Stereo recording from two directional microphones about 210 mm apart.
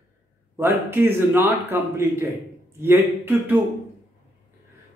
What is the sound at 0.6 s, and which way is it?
A man's voice, 10° right (ahead or behind).